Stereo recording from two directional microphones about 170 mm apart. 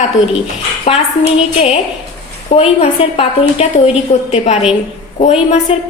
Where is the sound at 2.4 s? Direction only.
40° left (ahead or behind).